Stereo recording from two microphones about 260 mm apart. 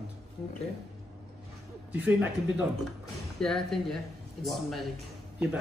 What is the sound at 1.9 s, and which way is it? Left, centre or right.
Speech, centre.